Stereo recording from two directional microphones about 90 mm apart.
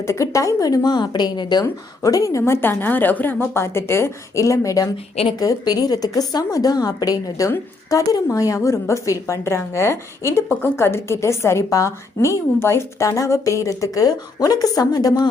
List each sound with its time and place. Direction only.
0.0 s a woman's voice: 35° left (ahead or behind); by 1.6 s 55° left (ahead or behind)
2.0 s a woman's voice: 40° left (ahead or behind)
2.4 s a woman's voice: 25° left (ahead or behind); by 15.3 s 45° left (ahead or behind)